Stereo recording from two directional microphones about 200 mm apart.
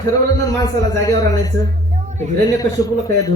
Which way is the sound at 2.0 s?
35° right (ahead or behind).